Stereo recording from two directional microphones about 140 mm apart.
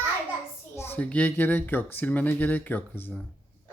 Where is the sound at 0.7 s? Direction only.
15° left (ahead or behind).